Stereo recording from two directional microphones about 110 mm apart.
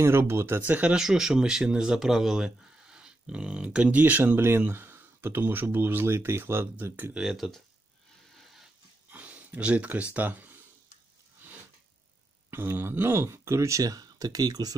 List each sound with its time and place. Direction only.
0.0 s speech: 25° right (ahead or behind)
7.2 s speech: centre (ahead or behind)
9.1 s a sound: 15° right (ahead or behind)
10.1 s speech: 15° right (ahead or behind)
12.4 s speech: 20° right (ahead or behind)